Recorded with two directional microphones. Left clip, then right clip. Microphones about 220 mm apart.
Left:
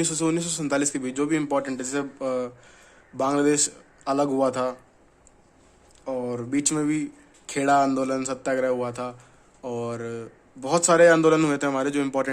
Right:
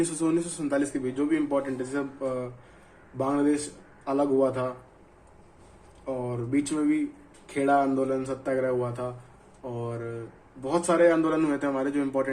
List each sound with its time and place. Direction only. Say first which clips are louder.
0.0 s a man's voice: left 1 dB; 35° left (ahead or behind)
6.1 s a man's voice: left 2 dB; 55° left (ahead or behind)